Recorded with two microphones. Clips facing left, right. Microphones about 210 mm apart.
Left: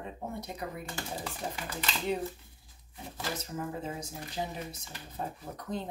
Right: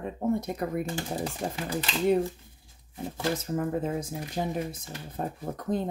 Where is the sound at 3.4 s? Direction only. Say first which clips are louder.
Right 8 dB; 55° right (ahead or behind).